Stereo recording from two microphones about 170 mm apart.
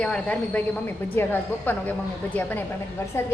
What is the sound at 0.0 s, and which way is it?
A woman's voice, 5° left (ahead or behind).